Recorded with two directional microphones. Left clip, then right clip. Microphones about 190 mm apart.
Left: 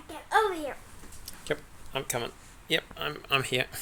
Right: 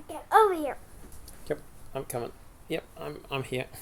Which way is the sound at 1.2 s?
5° left (ahead or behind).